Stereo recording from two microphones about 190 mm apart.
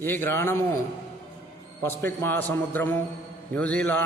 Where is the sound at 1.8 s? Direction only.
10° left (ahead or behind).